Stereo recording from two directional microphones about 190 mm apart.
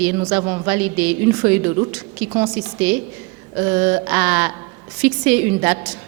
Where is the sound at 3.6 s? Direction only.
15° right (ahead or behind).